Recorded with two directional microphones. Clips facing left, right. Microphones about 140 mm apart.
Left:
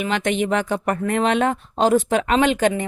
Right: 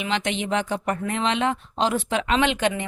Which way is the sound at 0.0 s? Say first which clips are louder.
Left 5 dB; 50° left (ahead or behind).